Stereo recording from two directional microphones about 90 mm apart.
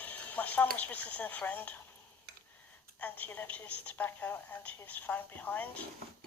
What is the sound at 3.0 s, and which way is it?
A woman's voice, 20° left (ahead or behind).